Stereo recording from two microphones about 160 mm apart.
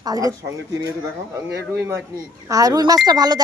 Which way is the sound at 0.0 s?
20° right (ahead or behind).